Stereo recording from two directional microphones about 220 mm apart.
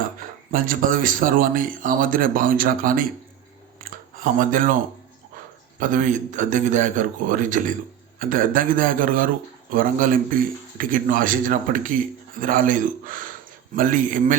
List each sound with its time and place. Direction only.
0.2 s speech: 40° right (ahead or behind)
3.8 s a sound: 35° right (ahead or behind)
5.8 s speech: 35° right (ahead or behind)